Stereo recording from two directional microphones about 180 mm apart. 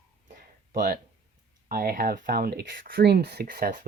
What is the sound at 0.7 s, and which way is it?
Speech, 45° right (ahead or behind).